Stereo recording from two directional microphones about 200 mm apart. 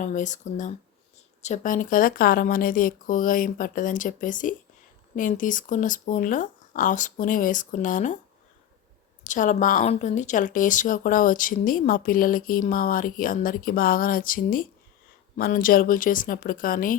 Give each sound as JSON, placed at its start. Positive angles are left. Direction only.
{"t": 0.0, "sound": "speech", "side_deg": 40}
{"t": 9.2, "sound": "speech", "side_deg": 40}